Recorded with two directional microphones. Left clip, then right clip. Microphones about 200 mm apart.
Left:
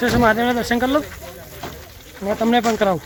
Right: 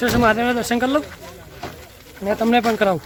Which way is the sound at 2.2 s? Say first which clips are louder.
Even; 5° right (ahead or behind).